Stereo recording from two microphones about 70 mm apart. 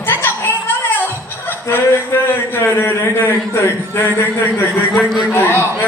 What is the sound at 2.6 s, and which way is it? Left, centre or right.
Speech, left.